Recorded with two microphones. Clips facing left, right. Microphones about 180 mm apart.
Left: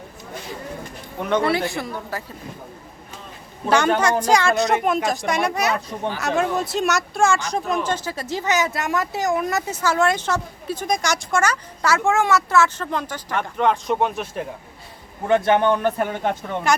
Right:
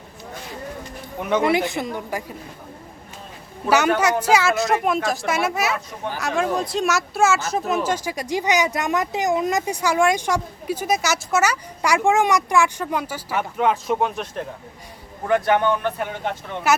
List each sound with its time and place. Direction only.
1.2 s speech: 10° right (ahead or behind)
4.2 s speech: 5° right (ahead or behind)
15.3 s a man's voice: 25° left (ahead or behind); by 16.6 s 45° left (ahead or behind)